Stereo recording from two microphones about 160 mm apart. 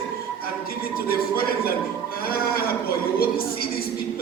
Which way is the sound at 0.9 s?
70° left (ahead or behind).